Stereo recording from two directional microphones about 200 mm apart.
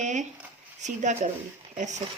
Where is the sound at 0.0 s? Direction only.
35° right (ahead or behind).